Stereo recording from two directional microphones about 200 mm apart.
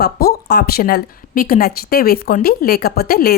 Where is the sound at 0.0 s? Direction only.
50° left (ahead or behind).